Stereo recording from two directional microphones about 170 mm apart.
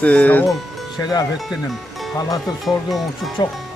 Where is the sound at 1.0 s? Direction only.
20° left (ahead or behind).